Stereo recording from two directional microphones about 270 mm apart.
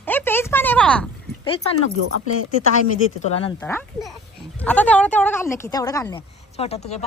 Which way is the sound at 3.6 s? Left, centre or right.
Centre.